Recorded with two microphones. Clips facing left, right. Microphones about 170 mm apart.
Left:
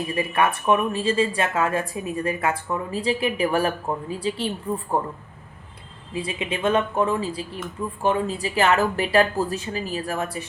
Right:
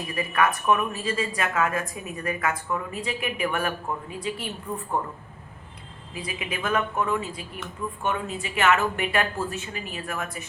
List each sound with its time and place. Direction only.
0.1 s speech: 30° left (ahead or behind)
6.1 s speech: 30° left (ahead or behind)